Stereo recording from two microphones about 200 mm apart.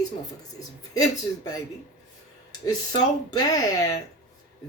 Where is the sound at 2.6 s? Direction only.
20° left (ahead or behind).